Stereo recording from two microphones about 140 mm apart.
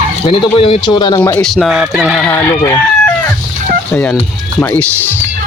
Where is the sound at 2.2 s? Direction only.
15° left (ahead or behind).